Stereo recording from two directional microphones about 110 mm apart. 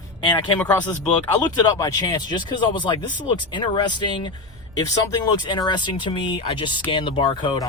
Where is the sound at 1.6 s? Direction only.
40° left (ahead or behind).